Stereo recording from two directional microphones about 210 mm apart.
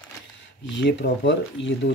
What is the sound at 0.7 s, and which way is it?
Speech, 55° left (ahead or behind).